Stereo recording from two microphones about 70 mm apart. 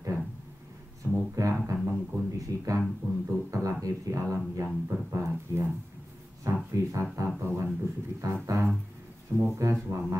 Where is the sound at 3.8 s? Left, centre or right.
Right.